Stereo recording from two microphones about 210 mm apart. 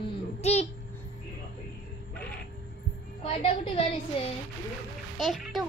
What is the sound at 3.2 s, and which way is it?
Speech, 25° left (ahead or behind).